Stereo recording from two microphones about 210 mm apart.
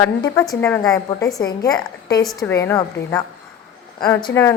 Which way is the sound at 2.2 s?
10° left (ahead or behind).